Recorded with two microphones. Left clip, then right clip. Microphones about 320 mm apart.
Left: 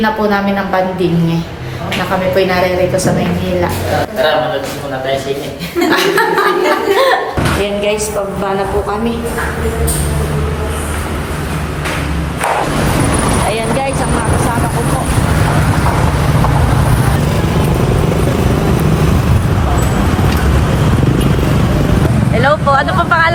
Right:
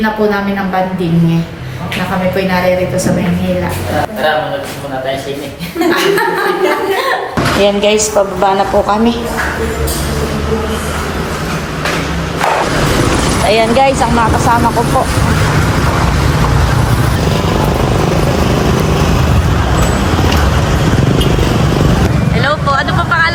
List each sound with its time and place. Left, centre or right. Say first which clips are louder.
7.6 s a woman's voice: right 7 dB; centre
13.5 s speech: right 7 dB; right
22.4 s speech: left 2 dB; centre